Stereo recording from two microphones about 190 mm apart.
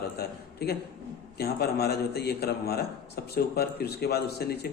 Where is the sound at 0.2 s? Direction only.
55° left (ahead or behind).